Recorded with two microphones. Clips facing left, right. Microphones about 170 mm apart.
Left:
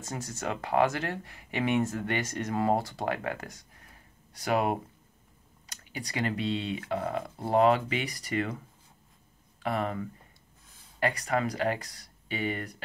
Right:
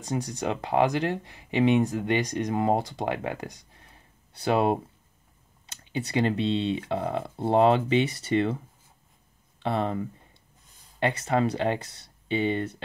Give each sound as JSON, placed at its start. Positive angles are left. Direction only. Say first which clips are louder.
{"t": 0.0, "sound": "speech", "louder": "right 6 dB", "side_deg": -15}
{"t": 9.6, "sound": "speech", "louder": "right 3 dB", "side_deg": -30}